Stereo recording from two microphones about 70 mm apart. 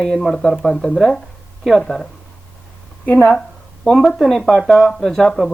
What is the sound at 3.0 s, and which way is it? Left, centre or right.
Speech, left.